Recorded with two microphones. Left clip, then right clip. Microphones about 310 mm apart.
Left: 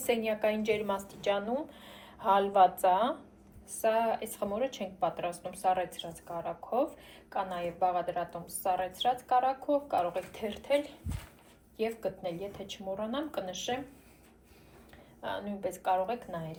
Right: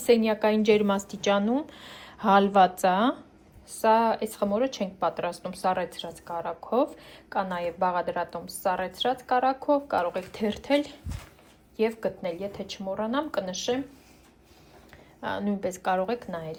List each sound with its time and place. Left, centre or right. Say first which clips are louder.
0.0 s a woman's voice: right 7 dB; right
15.2 s a woman's voice: right 6 dB; right